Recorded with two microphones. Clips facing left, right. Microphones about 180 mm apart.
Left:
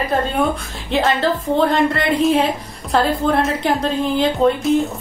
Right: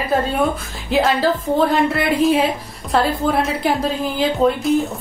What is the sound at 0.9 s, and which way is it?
A woman's voice, centre (ahead or behind).